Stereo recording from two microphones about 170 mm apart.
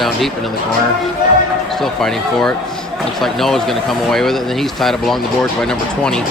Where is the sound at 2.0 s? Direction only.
5° left (ahead or behind).